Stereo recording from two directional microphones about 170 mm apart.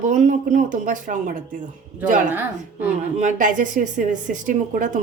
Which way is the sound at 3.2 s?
45° right (ahead or behind).